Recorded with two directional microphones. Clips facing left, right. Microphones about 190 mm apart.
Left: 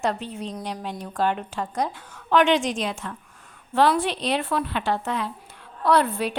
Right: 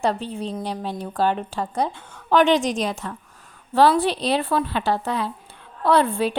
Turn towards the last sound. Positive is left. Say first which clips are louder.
# right 2 dB
turn(degrees=-30)  # may be behind; listen again after turning